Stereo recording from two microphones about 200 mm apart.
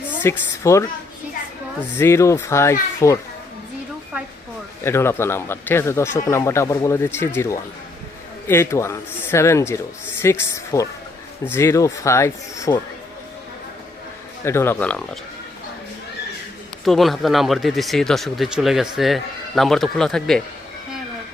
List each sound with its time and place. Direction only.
0.2 s speech: 15° left (ahead or behind)
2.0 s speech: 15° left (ahead or behind)
4.8 s speech: 10° left (ahead or behind)
8.4 s speech: 10° left (ahead or behind)
14.4 s speech: 10° left (ahead or behind)
16.8 s speech: centre (ahead or behind)